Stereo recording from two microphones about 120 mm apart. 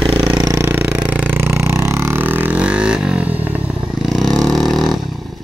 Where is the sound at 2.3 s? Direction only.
10° right (ahead or behind).